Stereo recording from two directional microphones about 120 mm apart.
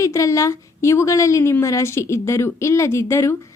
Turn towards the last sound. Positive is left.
turn(degrees=25)  # may be behind; listen again after turning